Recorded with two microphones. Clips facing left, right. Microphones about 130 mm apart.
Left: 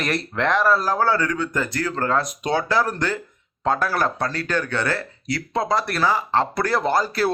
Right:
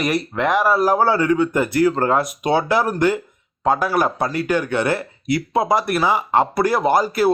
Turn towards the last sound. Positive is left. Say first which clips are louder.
# right 4 dB
turn(degrees=-15)  # may be behind; listen again after turning